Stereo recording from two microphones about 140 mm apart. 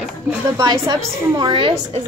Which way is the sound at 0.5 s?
25° right (ahead or behind).